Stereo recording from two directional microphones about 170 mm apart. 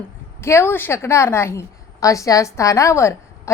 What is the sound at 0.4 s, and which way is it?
A woman's voice, 15° left (ahead or behind).